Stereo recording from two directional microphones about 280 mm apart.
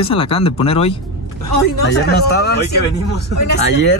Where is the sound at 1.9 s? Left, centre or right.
Left.